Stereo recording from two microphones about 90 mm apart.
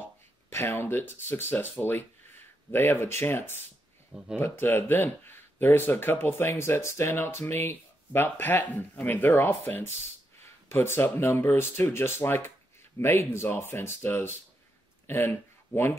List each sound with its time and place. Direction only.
0.5 s speech: 25° left (ahead or behind)